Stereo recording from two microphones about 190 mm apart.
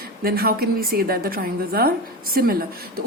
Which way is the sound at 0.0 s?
50° right (ahead or behind).